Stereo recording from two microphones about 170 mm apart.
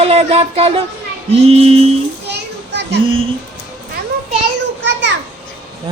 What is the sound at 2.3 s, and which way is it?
Children playing, 90° right.